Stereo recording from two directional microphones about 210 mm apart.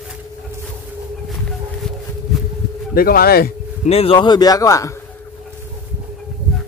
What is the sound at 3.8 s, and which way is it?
A man's voice, 25° left (ahead or behind).